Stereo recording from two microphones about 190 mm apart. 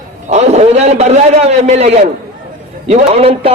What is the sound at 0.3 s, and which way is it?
A man's voice, 35° right (ahead or behind).